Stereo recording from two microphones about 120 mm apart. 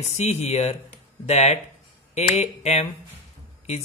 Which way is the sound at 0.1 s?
65° left (ahead or behind).